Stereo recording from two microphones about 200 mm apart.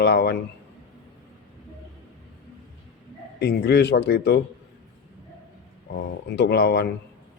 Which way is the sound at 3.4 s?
55° left (ahead or behind).